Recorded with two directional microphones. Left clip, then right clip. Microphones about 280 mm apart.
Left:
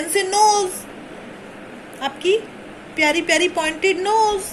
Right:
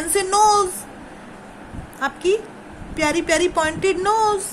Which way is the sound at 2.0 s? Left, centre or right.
Right.